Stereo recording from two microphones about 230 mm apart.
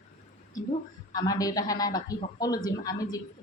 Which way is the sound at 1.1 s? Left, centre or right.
Centre.